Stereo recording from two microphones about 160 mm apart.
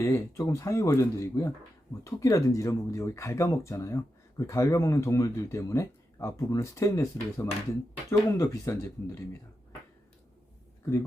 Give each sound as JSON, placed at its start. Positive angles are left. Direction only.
{"t": 0.0, "sound": "speech", "side_deg": 20}